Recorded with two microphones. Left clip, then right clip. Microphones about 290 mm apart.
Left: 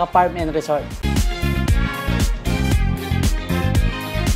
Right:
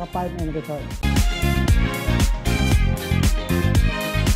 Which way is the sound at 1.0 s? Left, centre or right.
Centre.